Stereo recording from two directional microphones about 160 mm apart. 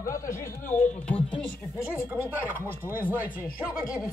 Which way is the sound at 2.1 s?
10° right (ahead or behind).